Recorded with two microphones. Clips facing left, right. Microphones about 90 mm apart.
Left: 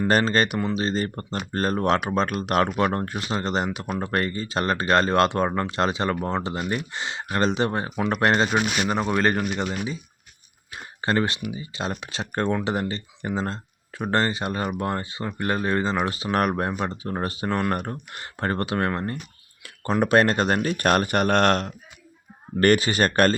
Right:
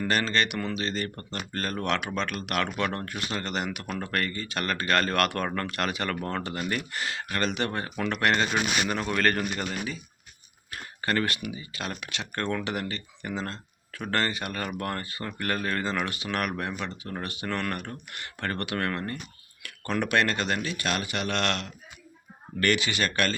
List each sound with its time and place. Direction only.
0.1 s speech: 35° left (ahead or behind)
0.6 s speech: 25° left (ahead or behind)
10.7 s a sound: 25° left (ahead or behind)
11.5 s speech: 25° left (ahead or behind); by 23.3 s 45° left (ahead or behind)